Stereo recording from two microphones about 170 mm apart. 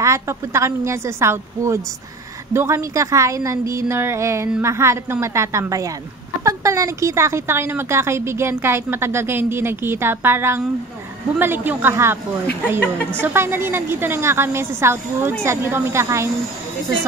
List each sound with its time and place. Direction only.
0.0 s speech: 15° right (ahead or behind)
13.2 s speech: 15° right (ahead or behind)